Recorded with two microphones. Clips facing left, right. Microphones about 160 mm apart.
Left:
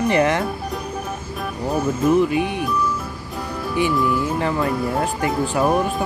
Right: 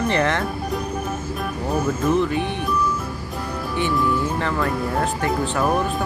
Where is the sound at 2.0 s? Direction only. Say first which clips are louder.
Left 5 dB; 10° left (ahead or behind).